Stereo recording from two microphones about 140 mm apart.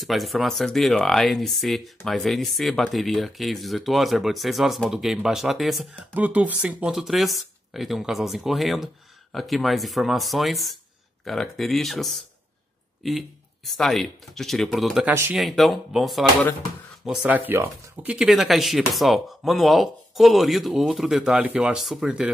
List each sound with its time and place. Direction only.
0.0 s speech: centre (ahead or behind)
6.1 s speech: 10° right (ahead or behind)
13.7 s speech: centre (ahead or behind)
15.0 s speech: 15° right (ahead or behind)
15.3 s speech: centre (ahead or behind)